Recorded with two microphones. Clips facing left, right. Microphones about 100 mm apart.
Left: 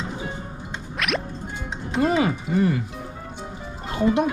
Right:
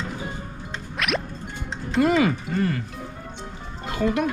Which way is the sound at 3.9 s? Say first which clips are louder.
Left 3 dB; 25° left (ahead or behind).